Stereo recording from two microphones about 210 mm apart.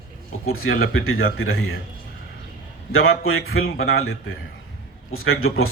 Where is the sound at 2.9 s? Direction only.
75° left (ahead or behind).